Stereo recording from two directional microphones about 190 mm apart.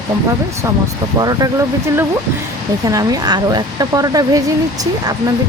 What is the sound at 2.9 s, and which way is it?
Speech, 20° right (ahead or behind).